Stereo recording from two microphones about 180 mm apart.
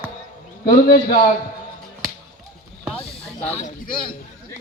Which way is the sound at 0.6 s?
55° left (ahead or behind).